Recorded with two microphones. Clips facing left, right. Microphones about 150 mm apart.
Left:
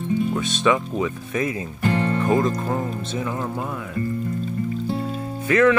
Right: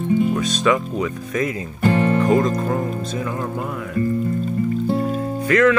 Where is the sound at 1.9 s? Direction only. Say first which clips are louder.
Right 5 dB; 50° right (ahead or behind).